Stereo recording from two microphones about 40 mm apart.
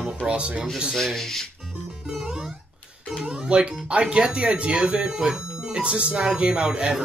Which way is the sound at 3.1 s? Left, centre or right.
Right.